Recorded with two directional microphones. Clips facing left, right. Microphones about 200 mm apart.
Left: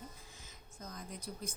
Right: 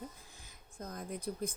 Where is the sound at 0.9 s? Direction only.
55° right (ahead or behind).